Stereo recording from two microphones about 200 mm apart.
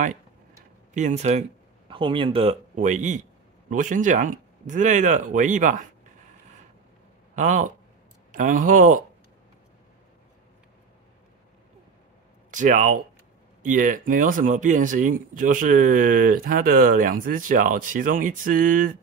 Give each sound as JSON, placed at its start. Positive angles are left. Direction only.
{"t": 0.9, "sound": "speech", "side_deg": -35}
{"t": 7.3, "sound": "speech", "side_deg": -40}
{"t": 12.4, "sound": "speech", "side_deg": -40}